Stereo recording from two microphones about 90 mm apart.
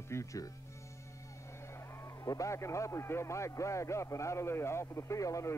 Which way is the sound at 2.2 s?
35° left (ahead or behind).